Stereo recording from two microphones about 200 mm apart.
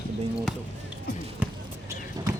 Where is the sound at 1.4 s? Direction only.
10° right (ahead or behind).